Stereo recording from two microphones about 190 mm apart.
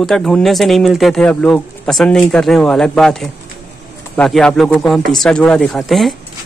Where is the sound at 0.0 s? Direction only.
Centre (ahead or behind).